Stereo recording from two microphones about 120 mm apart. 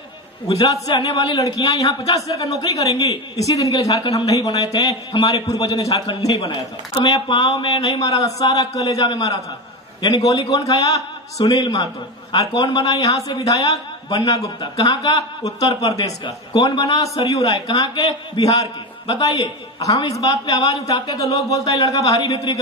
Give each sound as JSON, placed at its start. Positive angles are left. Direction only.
{"t": 0.8, "sound": "a man's voice", "side_deg": 35}
{"t": 1.4, "sound": "a man's voice", "side_deg": 30}
{"t": 16.3, "sound": "a man's voice", "side_deg": 40}